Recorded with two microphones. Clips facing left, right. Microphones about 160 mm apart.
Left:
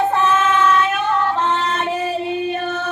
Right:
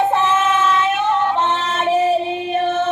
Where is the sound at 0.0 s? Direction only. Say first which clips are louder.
Even; 20° right (ahead or behind).